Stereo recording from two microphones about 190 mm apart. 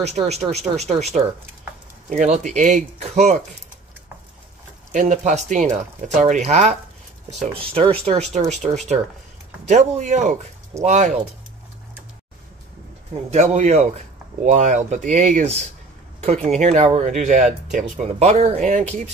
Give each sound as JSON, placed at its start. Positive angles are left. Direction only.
{"t": 0.0, "sound": "speech", "side_deg": -35}
{"t": 4.9, "sound": "speech", "side_deg": -40}
{"t": 13.3, "sound": "speech", "side_deg": -35}